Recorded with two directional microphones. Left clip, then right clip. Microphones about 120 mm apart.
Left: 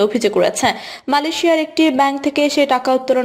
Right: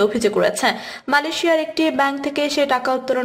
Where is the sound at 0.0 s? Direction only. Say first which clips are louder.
Left 2 dB; 35° left (ahead or behind).